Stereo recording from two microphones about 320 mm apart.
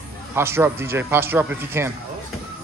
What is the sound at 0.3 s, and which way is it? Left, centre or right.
A man's voice, centre.